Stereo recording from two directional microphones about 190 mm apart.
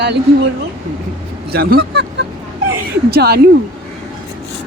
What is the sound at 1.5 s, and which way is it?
Speech, 55° right (ahead or behind).